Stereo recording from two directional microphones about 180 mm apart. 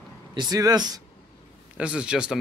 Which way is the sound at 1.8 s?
5° right (ahead or behind).